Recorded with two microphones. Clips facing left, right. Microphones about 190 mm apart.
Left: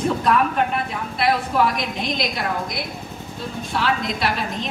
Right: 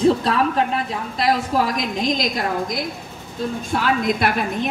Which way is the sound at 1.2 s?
40° right (ahead or behind).